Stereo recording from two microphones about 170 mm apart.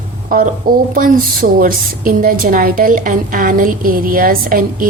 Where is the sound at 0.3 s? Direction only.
55° right (ahead or behind).